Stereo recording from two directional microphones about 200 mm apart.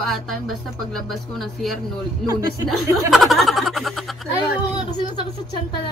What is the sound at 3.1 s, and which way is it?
Speech, centre (ahead or behind).